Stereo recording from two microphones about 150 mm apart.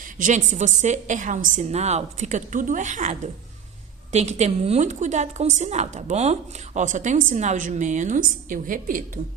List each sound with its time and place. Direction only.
0.0 s a woman's voice: 60° right (ahead or behind)